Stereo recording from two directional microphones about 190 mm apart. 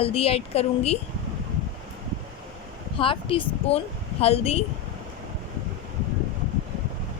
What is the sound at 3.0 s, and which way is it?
A woman's voice, 30° left (ahead or behind).